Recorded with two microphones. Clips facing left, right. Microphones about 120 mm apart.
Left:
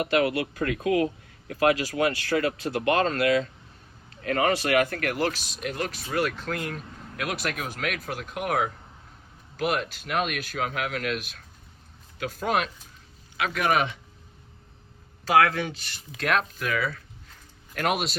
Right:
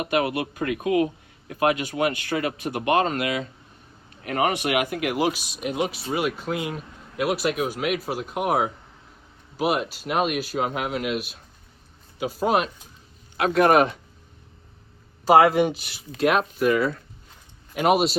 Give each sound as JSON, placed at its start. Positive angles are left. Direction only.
{"t": 0.0, "sound": "speech", "side_deg": -25}
{"t": 13.7, "sound": "speech", "side_deg": 0}
{"t": 15.2, "sound": "speech", "side_deg": -5}